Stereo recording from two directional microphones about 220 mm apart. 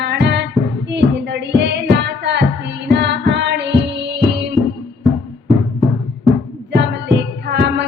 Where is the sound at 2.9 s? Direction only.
50° right (ahead or behind).